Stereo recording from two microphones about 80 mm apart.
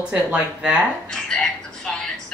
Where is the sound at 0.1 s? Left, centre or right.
Centre.